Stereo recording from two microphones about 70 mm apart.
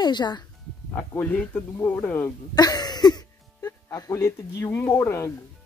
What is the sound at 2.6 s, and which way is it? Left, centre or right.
Music, left.